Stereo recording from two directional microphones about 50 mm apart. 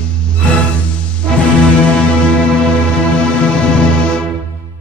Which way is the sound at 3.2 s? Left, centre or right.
Left.